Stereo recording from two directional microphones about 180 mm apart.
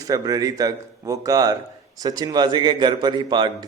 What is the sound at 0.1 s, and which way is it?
A man's voice, 20° right (ahead or behind).